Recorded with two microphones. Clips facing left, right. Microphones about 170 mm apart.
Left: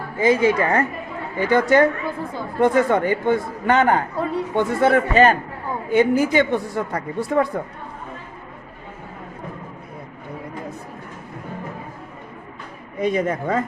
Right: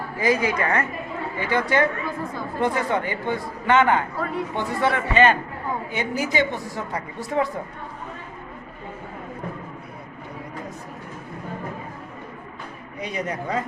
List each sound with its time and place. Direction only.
0.2 s a woman's voice: 25° left (ahead or behind)
1.4 s a woman's voice: 45° left (ahead or behind)
5.9 s a woman's voice: 50° left (ahead or behind)
13.0 s a woman's voice: 50° left (ahead or behind)